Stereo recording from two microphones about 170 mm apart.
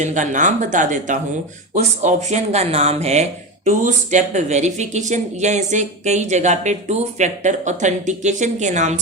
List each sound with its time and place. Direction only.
0.0 s speech: 45° right (ahead or behind)